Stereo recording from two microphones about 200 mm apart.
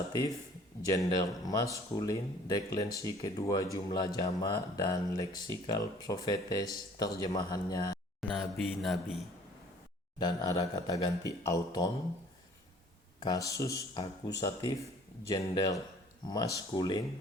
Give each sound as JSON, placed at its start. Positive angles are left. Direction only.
{"t": 0.1, "sound": "speech", "side_deg": 20}
{"t": 8.4, "sound": "mantra", "side_deg": 0}
{"t": 10.2, "sound": "speech", "side_deg": 20}
{"t": 13.1, "sound": "speech", "side_deg": 20}